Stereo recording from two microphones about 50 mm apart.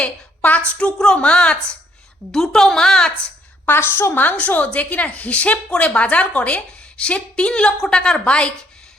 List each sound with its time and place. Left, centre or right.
0.0 s a sound: left
0.8 s a woman's voice: left
2.3 s a woman's voice: centre
3.7 s a woman's voice: left